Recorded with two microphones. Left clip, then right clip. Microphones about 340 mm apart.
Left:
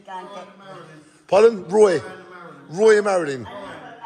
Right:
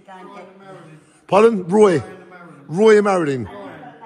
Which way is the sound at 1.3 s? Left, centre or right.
Centre.